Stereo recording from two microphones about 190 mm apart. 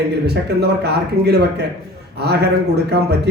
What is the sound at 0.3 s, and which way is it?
Speech, 60° right (ahead or behind).